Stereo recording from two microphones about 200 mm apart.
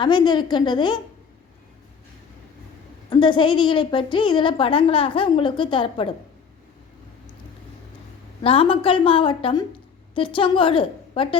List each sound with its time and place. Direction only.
0.0 s a woman's voice: 20° left (ahead or behind)
3.1 s a woman's voice: 25° left (ahead or behind)
8.4 s a woman's voice: 25° left (ahead or behind)